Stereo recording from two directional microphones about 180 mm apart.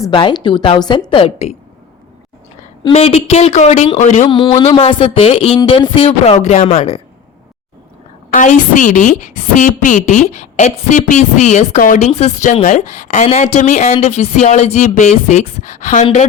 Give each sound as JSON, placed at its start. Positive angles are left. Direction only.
{"t": 0.0, "sound": "a woman's voice", "side_deg": 25}
{"t": 2.8, "sound": "a woman's voice", "side_deg": 35}
{"t": 4.3, "sound": "a woman's voice", "side_deg": 25}
{"t": 8.3, "sound": "a woman's voice", "side_deg": 45}